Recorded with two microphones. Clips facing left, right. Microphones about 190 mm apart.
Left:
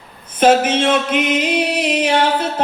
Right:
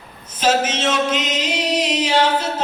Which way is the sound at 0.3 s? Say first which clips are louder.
Left 6 dB; 55° left (ahead or behind).